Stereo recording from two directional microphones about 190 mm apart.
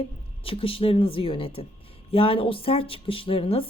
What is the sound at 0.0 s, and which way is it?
A woman's voice, 30° left (ahead or behind).